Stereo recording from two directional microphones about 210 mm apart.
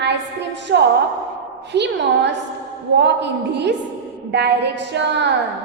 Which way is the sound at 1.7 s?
55° right (ahead or behind).